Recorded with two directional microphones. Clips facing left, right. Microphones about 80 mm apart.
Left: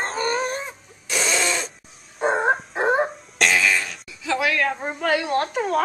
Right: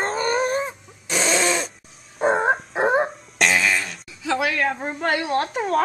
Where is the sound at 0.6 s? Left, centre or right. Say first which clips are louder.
Right 6 dB; right.